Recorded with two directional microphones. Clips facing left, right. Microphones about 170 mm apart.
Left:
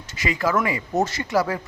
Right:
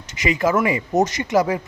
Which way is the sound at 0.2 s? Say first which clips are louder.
Right 4 dB; 20° right (ahead or behind).